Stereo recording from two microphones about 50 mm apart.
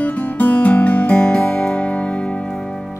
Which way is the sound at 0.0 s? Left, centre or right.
Left.